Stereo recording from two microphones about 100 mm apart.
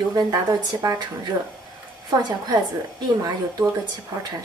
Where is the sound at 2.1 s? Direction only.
45° right (ahead or behind).